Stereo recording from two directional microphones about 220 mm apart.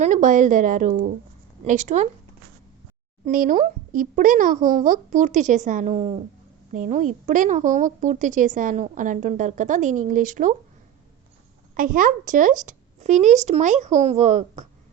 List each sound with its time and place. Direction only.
0.0 s a woman's voice: 35° right (ahead or behind)
3.2 s a woman's voice: 40° right (ahead or behind)
11.8 s a woman's voice: 40° right (ahead or behind)